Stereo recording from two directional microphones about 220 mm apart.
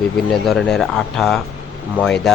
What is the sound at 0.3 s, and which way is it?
Speech, centre (ahead or behind).